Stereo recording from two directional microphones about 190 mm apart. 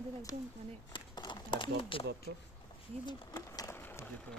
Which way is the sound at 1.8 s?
30° left (ahead or behind).